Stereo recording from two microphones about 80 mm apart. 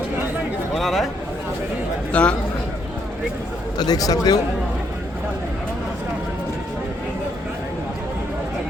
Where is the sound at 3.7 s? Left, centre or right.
Left.